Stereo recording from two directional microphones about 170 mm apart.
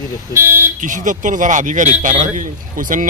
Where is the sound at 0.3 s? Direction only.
15° right (ahead or behind).